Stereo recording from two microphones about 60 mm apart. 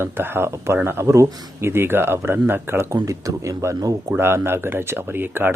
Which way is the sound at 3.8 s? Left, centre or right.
Right.